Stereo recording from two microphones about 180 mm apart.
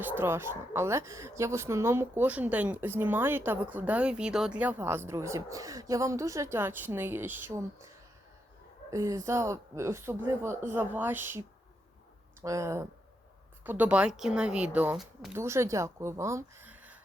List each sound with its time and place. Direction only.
0.0 s speech: 10° right (ahead or behind)
8.9 s speech: 15° right (ahead or behind)